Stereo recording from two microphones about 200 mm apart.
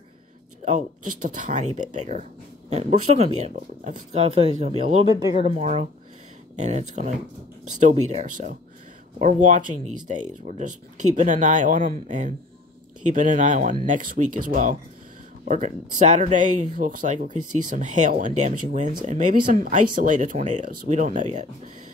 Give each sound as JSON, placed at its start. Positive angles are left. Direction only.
{"t": 0.7, "sound": "speech", "side_deg": -40}
{"t": 5.1, "sound": "speech", "side_deg": -15}
{"t": 5.4, "sound": "speech", "side_deg": -30}